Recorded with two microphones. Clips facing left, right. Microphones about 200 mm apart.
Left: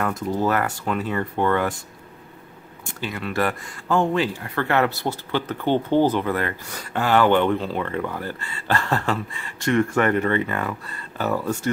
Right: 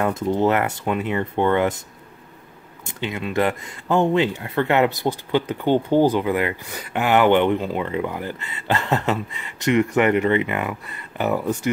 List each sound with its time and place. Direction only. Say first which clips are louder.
0.0 s speech: right 3 dB; 25° right (ahead or behind)
3.0 s speech: right 3 dB; 20° right (ahead or behind)